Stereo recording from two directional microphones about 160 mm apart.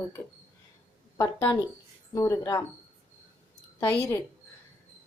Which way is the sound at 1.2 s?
20° left (ahead or behind).